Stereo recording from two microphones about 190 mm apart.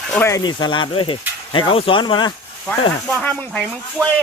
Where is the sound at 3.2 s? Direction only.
5° left (ahead or behind).